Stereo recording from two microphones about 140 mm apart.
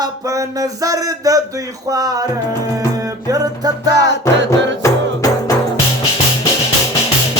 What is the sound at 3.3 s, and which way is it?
Music, 25° right (ahead or behind).